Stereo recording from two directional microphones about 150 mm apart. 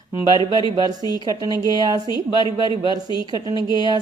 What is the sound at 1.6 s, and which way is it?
Speech, 25° right (ahead or behind).